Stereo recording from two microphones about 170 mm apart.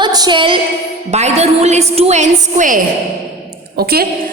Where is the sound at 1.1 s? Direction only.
40° right (ahead or behind).